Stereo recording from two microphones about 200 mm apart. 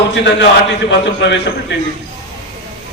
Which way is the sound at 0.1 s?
60° left (ahead or behind).